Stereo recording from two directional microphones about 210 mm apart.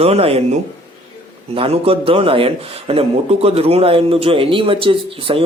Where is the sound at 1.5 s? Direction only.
25° right (ahead or behind).